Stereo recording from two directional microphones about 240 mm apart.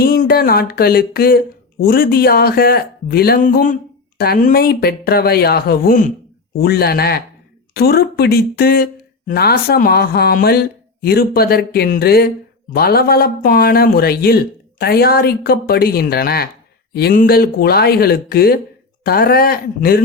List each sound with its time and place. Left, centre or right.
0.0 s speech: left